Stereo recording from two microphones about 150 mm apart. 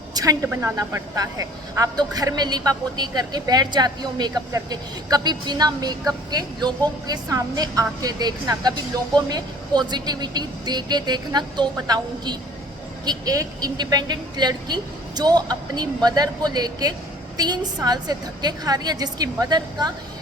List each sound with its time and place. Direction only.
0.1 s a woman's voice: 25° right (ahead or behind)